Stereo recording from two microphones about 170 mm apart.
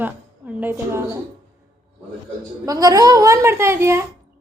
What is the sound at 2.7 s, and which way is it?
A woman's voice, 20° right (ahead or behind).